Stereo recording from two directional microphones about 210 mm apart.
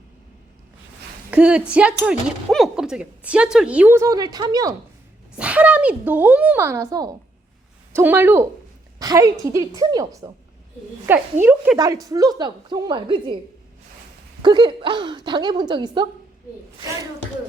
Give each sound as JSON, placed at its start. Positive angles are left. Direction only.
{"t": 1.3, "sound": "speech", "side_deg": -5}
{"t": 5.4, "sound": "a woman's voice", "side_deg": -5}
{"t": 14.4, "sound": "a woman's voice", "side_deg": -20}